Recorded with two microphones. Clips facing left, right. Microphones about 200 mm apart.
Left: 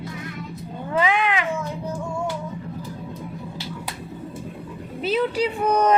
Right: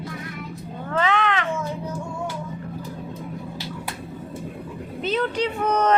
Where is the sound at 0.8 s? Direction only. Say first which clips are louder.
Left 1 dB; 10° left (ahead or behind).